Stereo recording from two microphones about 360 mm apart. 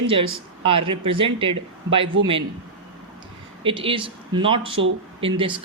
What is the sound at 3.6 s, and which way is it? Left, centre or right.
Speech, centre.